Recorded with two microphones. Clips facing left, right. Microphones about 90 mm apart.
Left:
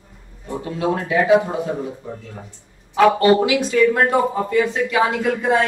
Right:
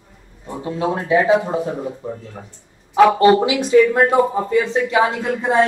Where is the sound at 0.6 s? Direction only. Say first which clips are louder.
Right 1 dB; 25° right (ahead or behind).